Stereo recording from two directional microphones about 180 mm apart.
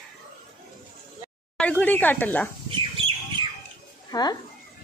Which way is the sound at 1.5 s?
5° left (ahead or behind).